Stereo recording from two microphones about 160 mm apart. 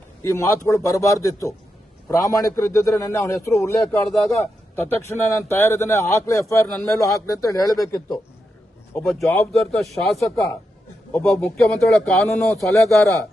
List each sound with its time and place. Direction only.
0.2 s a man's voice: 20° left (ahead or behind)
4.1 s speech: centre (ahead or behind)
4.4 s a man's voice: 15° left (ahead or behind)
9.0 s speech: centre (ahead or behind)